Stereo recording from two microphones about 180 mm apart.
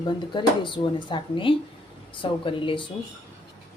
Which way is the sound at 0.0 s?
25° left (ahead or behind).